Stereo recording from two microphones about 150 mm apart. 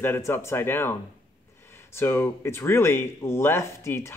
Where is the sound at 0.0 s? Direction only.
15° left (ahead or behind).